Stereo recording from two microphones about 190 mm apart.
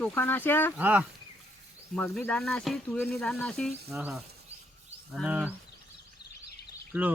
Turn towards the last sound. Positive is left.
turn(degrees=-5)  # may be behind; listen again after turning